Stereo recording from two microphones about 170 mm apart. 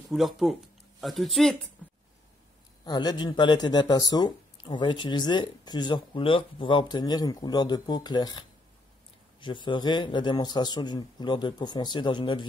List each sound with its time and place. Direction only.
0.1 s speech: centre (ahead or behind)
2.8 s speech: 25° left (ahead or behind)